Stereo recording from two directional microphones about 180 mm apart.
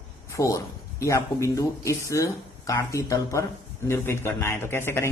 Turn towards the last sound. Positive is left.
turn(degrees=15)  # may be behind; listen again after turning